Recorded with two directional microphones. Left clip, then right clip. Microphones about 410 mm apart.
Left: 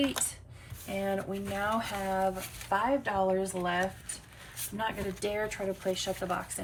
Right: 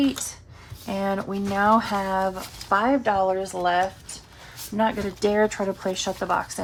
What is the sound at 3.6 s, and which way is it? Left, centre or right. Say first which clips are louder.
Speech: right 9 dB; centre.